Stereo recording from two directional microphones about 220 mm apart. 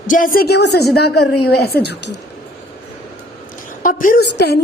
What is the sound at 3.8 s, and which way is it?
Speech, 35° left (ahead or behind).